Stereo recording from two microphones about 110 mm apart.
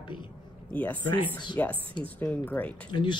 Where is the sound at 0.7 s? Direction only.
15° left (ahead or behind).